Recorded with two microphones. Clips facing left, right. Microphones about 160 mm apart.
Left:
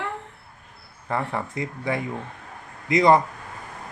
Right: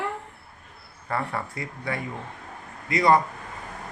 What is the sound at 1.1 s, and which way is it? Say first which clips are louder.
Speech: left 2 dB; 20° left (ahead or behind).